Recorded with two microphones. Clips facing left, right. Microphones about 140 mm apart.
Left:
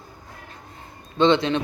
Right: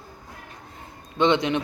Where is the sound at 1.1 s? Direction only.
15° right (ahead or behind).